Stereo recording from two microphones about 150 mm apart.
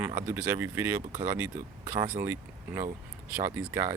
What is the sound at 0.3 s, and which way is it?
Speech, 15° right (ahead or behind).